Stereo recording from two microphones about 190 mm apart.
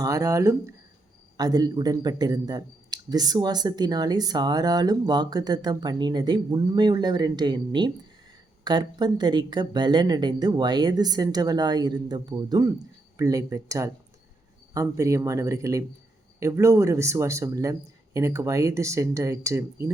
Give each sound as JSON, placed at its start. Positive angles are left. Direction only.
{"t": 0.0, "sound": "speech", "side_deg": -20}